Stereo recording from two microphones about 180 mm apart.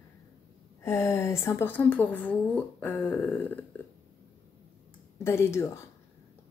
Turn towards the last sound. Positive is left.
turn(degrees=15)  # may be behind; listen again after turning